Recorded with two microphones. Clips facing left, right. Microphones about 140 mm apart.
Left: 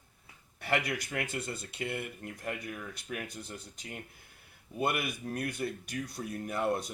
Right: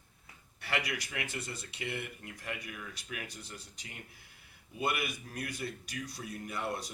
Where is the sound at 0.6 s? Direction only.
50° left (ahead or behind).